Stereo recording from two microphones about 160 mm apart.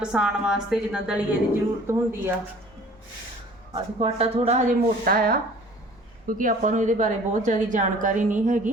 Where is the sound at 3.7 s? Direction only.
35° right (ahead or behind).